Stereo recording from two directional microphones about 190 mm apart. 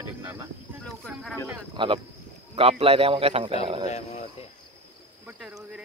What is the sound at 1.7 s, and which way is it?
A man's voice, 30° right (ahead or behind).